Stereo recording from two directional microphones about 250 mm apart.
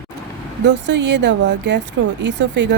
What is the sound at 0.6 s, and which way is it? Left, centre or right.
Speech, right.